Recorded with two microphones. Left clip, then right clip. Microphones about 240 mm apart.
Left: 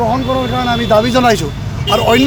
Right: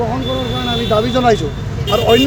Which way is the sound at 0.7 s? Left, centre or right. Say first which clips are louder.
Left 3 dB; left.